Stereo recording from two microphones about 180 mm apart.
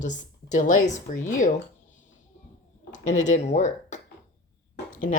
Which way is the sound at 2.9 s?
40° left (ahead or behind).